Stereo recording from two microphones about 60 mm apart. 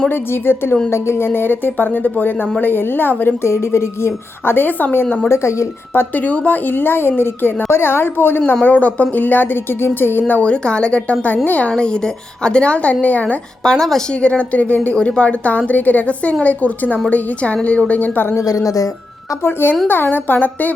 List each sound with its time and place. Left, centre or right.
0.1 s a woman's voice: left
0.9 s a woman's voice: left
3.4 s a woman's voice: left
5.3 s a woman's voice: left
5.9 s a woman's voice: left
8.6 s a woman's voice: left
10.4 s a woman's voice: centre
11.8 s a woman's voice: centre
13.7 s a woman's voice: centre
14.2 s a woman's voice: left
18.4 s speech: left
19.4 s a woman's voice: left